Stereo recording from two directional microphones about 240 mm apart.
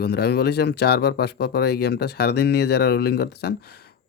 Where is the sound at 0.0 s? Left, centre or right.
Left.